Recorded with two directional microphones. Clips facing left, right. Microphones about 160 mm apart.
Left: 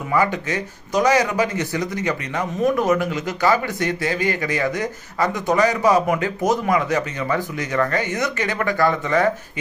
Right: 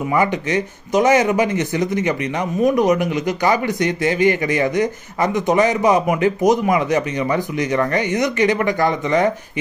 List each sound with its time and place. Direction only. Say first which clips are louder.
0.1 s speech: right 1 dB; 20° right (ahead or behind)